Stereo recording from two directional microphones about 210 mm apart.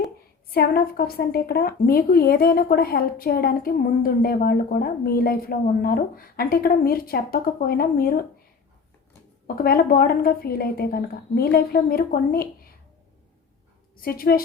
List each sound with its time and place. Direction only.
0.5 s a woman's voice: 45° left (ahead or behind)
9.6 s a woman's voice: 45° left (ahead or behind)
13.9 s a woman's voice: 45° left (ahead or behind)